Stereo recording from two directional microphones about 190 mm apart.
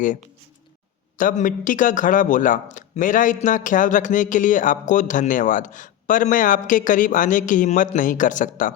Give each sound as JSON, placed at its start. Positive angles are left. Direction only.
{"t": 1.2, "sound": "speech", "side_deg": 40}